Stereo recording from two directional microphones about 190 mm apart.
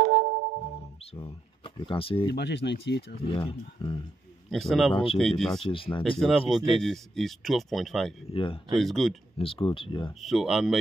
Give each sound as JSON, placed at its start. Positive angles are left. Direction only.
{"t": 0.0, "sound": "music", "side_deg": -45}
{"t": 1.1, "sound": "speech", "side_deg": 25}
{"t": 2.3, "sound": "speech", "side_deg": 65}
{"t": 3.3, "sound": "speech", "side_deg": 30}
{"t": 4.5, "sound": "speech", "side_deg": 0}
{"t": 4.9, "sound": "speech", "side_deg": 30}
{"t": 5.2, "sound": "speech", "side_deg": 0}
{"t": 5.6, "sound": "speech", "side_deg": 25}
{"t": 6.1, "sound": "speech", "side_deg": 0}
{"t": 8.3, "sound": "speech", "side_deg": 30}
{"t": 8.7, "sound": "speech", "side_deg": 0}
{"t": 9.4, "sound": "speech", "side_deg": 25}
{"t": 10.2, "sound": "speech", "side_deg": 0}